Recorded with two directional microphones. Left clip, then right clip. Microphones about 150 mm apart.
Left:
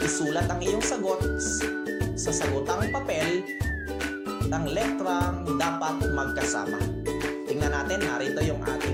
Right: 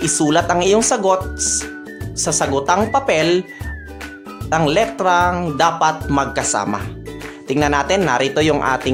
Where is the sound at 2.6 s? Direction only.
30° right (ahead or behind).